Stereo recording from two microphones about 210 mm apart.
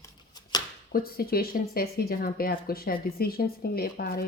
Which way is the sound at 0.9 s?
45° left (ahead or behind).